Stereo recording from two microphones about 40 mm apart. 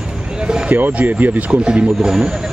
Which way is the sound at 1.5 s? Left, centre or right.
Right.